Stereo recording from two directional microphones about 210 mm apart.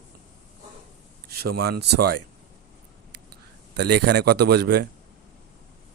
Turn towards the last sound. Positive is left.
turn(degrees=-50)  # may be behind; listen again after turning